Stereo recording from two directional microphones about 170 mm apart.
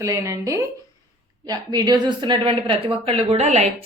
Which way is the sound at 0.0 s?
20° right (ahead or behind).